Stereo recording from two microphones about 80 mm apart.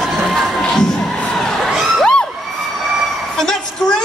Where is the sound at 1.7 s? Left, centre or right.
Centre.